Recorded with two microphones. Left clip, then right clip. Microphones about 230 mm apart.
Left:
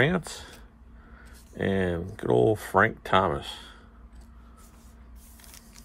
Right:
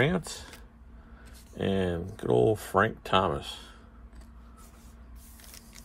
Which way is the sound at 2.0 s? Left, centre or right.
Centre.